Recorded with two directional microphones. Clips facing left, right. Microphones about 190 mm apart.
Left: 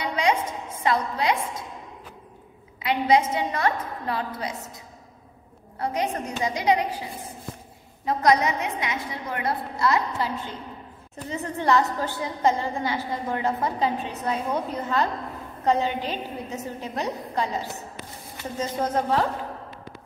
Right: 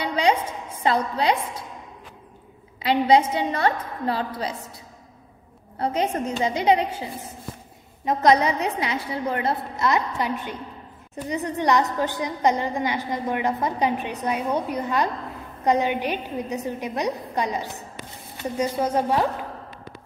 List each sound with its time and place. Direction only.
0.0 s a sound: 30° right (ahead or behind)
2.8 s a woman's voice: 30° right (ahead or behind)
5.8 s a woman's voice: 25° right (ahead or behind)
8.0 s a woman's voice: 20° right (ahead or behind)